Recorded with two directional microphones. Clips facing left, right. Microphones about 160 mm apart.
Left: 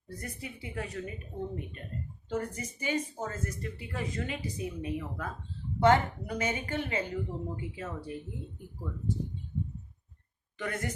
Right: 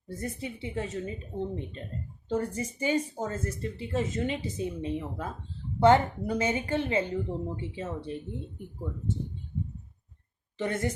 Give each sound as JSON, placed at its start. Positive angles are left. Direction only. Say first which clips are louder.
{"t": 0.1, "sound": "a woman's voice", "louder": "right 6 dB", "side_deg": -25}
{"t": 10.6, "sound": "a woman's voice", "louder": "right 5 dB", "side_deg": -25}